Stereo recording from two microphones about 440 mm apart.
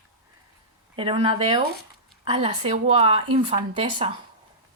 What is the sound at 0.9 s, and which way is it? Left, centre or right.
A woman's voice, centre.